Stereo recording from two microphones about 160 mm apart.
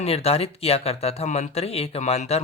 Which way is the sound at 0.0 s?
40° left (ahead or behind).